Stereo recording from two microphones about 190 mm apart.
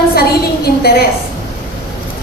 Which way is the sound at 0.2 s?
55° left (ahead or behind).